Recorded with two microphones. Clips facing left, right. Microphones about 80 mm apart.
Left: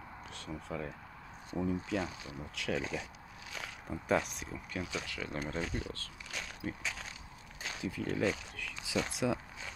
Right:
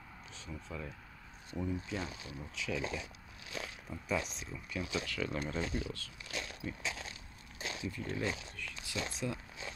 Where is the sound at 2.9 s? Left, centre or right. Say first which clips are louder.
Left 2 dB; left.